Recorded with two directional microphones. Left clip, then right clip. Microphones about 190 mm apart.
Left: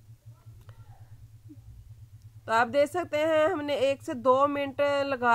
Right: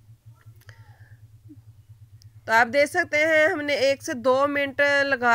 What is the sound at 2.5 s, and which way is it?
A woman's voice, 10° right (ahead or behind).